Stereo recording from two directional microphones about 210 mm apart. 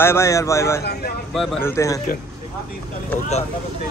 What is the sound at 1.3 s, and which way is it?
Speech, centre (ahead or behind).